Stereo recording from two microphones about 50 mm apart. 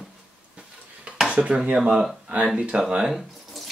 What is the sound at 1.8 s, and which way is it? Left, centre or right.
Speech, centre.